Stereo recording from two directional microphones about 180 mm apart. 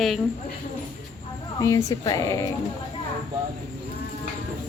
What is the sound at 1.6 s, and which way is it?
Speech, 20° left (ahead or behind).